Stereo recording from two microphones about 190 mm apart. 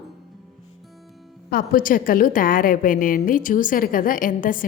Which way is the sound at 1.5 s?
50° left (ahead or behind).